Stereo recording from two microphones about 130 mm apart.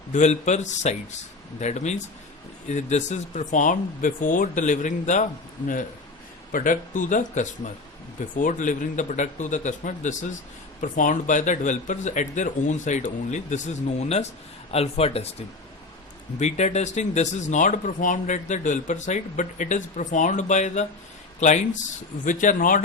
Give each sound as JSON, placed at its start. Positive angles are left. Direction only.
{"t": 0.1, "sound": "speech", "side_deg": 65}
{"t": 6.5, "sound": "speech", "side_deg": 90}
{"t": 22.2, "sound": "speech", "side_deg": 80}